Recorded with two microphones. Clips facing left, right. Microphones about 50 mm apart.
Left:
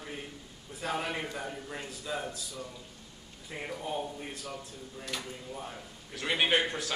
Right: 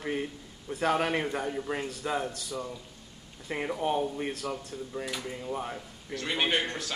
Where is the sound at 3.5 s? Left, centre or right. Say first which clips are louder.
Right 7 dB; right.